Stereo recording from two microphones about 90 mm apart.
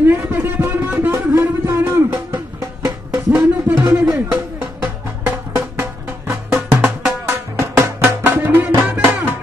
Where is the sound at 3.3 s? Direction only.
10° right (ahead or behind).